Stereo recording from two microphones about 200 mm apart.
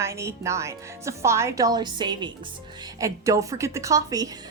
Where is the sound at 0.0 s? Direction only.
15° right (ahead or behind).